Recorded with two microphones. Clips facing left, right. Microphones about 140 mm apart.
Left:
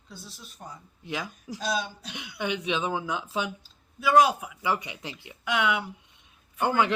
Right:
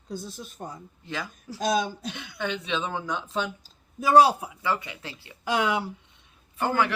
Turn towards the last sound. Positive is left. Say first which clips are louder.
# left 1 dB
turn(degrees=20)  # may be behind; listen again after turning